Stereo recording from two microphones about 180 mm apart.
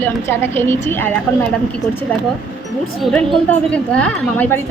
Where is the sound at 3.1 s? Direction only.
5° left (ahead or behind).